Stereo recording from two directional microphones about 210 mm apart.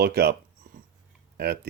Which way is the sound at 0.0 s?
50° right (ahead or behind).